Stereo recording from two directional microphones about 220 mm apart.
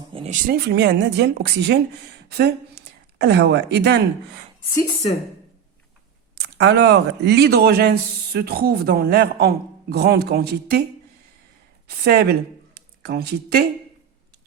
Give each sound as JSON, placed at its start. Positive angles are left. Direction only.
{"t": 0.1, "sound": "a sound", "side_deg": -25}
{"t": 0.4, "sound": "speech", "side_deg": -45}
{"t": 4.7, "sound": "speech", "side_deg": 15}
{"t": 6.3, "sound": "speech", "side_deg": -50}
{"t": 11.9, "sound": "speech", "side_deg": -45}